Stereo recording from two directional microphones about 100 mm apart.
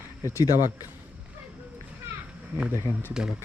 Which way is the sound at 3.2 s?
10° right (ahead or behind).